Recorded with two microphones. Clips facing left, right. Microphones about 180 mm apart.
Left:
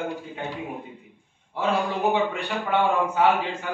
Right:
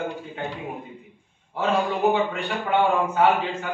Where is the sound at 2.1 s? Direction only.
15° left (ahead or behind).